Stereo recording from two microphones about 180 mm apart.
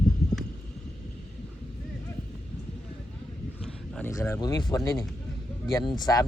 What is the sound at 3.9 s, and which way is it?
Speech, 15° left (ahead or behind).